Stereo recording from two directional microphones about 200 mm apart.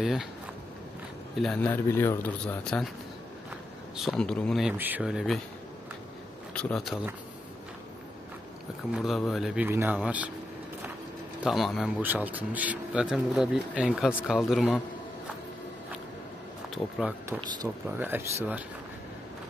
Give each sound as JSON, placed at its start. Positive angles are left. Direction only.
{"t": 0.0, "sound": "speech", "side_deg": 0}
{"t": 1.4, "sound": "speech", "side_deg": 5}
{"t": 3.9, "sound": "speech", "side_deg": 0}
{"t": 6.5, "sound": "speech", "side_deg": 5}
{"t": 8.9, "sound": "speech", "side_deg": 0}
{"t": 11.4, "sound": "speech", "side_deg": 0}
{"t": 17.3, "sound": "speech", "side_deg": -20}